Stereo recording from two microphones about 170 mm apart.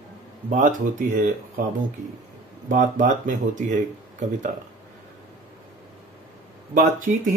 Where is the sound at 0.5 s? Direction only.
50° right (ahead or behind).